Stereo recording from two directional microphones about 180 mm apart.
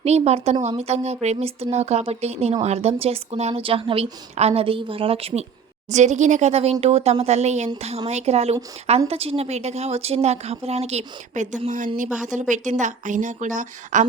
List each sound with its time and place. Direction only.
0.0 s a woman's voice: 35° right (ahead or behind)